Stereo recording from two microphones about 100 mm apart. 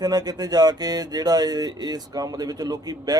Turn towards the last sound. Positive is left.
turn(degrees=-40)  # may be behind; listen again after turning